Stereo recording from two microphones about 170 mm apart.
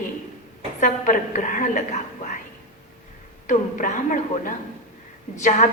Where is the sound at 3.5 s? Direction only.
45° left (ahead or behind).